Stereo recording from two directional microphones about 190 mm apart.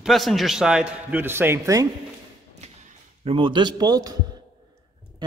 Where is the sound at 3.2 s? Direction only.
30° right (ahead or behind).